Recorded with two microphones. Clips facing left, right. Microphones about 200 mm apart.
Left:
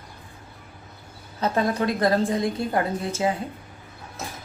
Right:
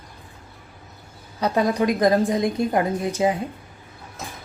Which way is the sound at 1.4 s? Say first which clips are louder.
Right 3 dB; 15° right (ahead or behind).